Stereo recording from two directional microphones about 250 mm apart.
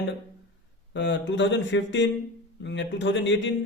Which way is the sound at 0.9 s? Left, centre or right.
Left.